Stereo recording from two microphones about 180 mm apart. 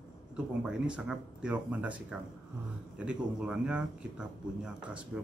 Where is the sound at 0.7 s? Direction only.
5° right (ahead or behind).